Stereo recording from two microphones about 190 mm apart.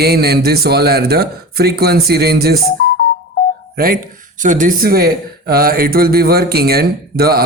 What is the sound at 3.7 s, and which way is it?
Speech, 50° right (ahead or behind).